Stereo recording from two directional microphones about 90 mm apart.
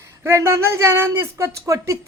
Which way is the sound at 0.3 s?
35° right (ahead or behind).